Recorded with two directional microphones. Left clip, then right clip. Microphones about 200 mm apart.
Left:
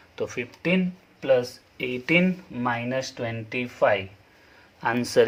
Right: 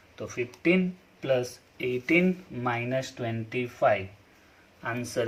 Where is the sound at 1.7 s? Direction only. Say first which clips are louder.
Left 2 dB; 55° left (ahead or behind).